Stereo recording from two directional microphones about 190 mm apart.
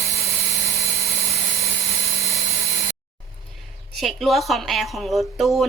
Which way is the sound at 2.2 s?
55° left (ahead or behind).